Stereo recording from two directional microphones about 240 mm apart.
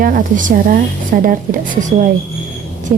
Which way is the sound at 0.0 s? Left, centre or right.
Right.